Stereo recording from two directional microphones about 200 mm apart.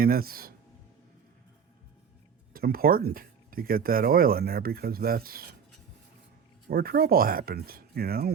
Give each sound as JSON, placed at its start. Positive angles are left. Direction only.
{"t": 0.0, "sound": "speech", "side_deg": -50}
{"t": 2.5, "sound": "speech", "side_deg": -50}
{"t": 6.7, "sound": "speech", "side_deg": -50}